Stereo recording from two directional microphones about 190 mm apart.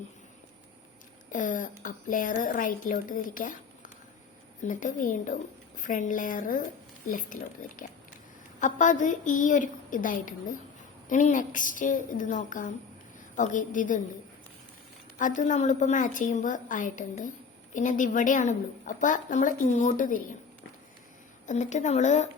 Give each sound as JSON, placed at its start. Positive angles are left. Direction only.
{"t": 1.3, "sound": "a woman's voice", "side_deg": 40}
{"t": 4.7, "sound": "a woman's voice", "side_deg": 45}
{"t": 15.2, "sound": "a woman's voice", "side_deg": 40}
{"t": 21.4, "sound": "speech", "side_deg": 40}